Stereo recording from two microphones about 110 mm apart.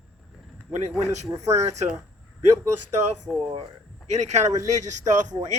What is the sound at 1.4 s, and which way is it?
Speech, 90° right.